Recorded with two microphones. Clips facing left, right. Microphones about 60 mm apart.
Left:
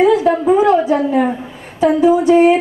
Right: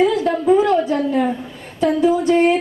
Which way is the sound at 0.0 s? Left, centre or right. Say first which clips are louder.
Left 4 dB; centre.